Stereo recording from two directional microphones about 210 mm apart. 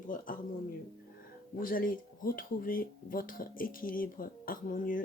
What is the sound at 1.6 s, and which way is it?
Speech, 40° left (ahead or behind).